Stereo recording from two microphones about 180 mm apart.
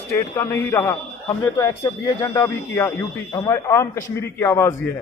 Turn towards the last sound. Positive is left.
turn(degrees=15)  # may be behind; listen again after turning